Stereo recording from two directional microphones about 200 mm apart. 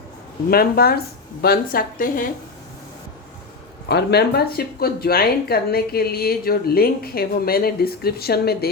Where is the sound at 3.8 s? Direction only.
55° left (ahead or behind).